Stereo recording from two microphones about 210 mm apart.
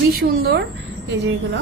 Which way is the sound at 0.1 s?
50° right (ahead or behind).